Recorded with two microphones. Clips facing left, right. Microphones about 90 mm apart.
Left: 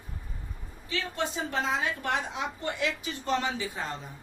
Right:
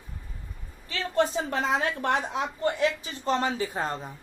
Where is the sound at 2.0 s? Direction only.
40° right (ahead or behind).